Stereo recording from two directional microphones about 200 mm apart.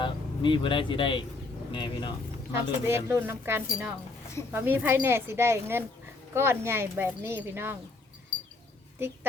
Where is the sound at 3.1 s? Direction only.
10° right (ahead or behind).